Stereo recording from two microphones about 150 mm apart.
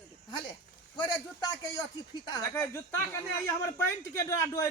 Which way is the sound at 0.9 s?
30° left (ahead or behind).